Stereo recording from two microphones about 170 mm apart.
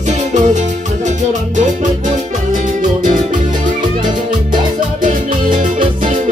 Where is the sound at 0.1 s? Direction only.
45° right (ahead or behind).